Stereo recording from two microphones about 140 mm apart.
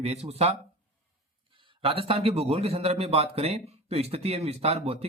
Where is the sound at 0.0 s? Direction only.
50° right (ahead or behind).